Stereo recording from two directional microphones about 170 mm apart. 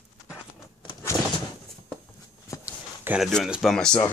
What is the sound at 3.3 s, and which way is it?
Speech, centre (ahead or behind).